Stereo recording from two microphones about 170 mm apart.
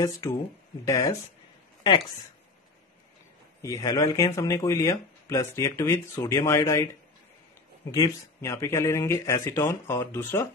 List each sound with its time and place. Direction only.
0.0 s a woman's voice: 15° left (ahead or behind)
3.6 s speech: 20° left (ahead or behind)
7.9 s speech: 20° left (ahead or behind)